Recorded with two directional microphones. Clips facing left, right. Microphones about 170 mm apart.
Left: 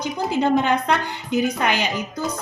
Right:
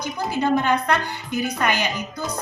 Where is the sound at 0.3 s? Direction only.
15° left (ahead or behind).